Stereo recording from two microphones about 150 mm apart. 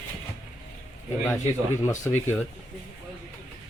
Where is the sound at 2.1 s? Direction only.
15° left (ahead or behind).